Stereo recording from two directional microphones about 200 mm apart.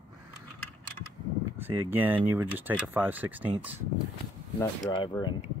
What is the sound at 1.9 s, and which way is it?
Speech, 10° right (ahead or behind).